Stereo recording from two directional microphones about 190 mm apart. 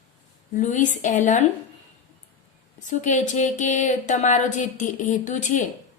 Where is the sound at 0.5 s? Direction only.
40° left (ahead or behind).